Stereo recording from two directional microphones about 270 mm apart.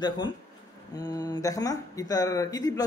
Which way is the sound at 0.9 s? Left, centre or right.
Centre.